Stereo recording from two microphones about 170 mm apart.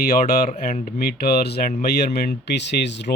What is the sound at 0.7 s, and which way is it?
Speech, 40° left (ahead or behind).